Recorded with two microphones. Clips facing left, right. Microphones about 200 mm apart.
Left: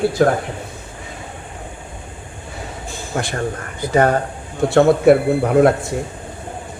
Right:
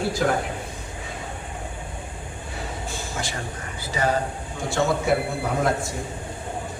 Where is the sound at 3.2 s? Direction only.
60° left (ahead or behind).